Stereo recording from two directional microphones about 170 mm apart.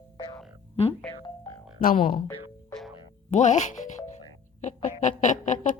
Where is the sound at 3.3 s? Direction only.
45° left (ahead or behind).